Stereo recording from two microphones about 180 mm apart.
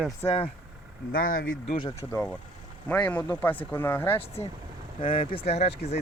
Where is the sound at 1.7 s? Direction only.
30° left (ahead or behind).